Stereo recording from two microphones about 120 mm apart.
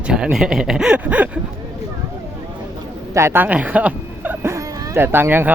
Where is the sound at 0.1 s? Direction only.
5° right (ahead or behind).